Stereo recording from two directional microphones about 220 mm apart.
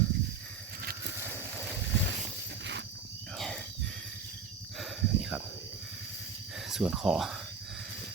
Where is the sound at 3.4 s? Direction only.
Centre (ahead or behind).